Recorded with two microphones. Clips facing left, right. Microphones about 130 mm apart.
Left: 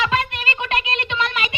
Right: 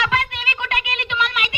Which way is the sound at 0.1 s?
25° left (ahead or behind).